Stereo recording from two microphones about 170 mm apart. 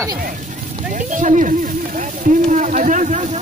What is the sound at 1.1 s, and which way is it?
Speech, 50° right (ahead or behind).